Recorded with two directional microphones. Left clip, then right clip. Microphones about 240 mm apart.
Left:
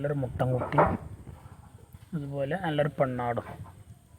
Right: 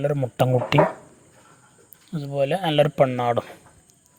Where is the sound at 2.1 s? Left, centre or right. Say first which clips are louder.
Right 9 dB; right.